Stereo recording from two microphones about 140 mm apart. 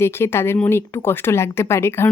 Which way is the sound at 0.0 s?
15° left (ahead or behind).